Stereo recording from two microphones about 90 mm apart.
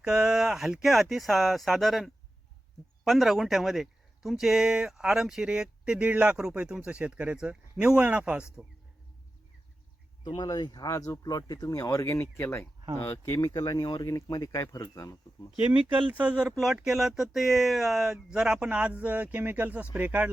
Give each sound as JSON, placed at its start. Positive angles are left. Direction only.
{"t": 0.0, "sound": "speech", "side_deg": -10}
{"t": 10.2, "sound": "speech", "side_deg": 50}
{"t": 16.0, "sound": "speech", "side_deg": -15}
{"t": 16.6, "sound": "speech", "side_deg": 0}